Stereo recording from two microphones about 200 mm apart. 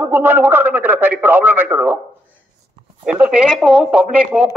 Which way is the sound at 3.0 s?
5° right (ahead or behind).